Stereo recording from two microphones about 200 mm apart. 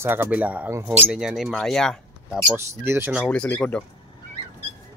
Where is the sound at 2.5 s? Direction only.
10° right (ahead or behind).